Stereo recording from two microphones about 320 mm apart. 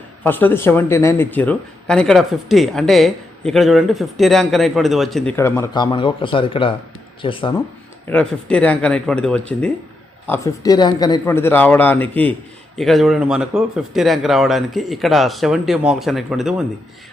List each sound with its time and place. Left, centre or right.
0.2 s a man's voice: centre
8.1 s a man's voice: centre